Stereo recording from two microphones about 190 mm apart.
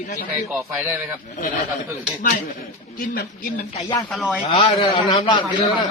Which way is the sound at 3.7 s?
25° left (ahead or behind).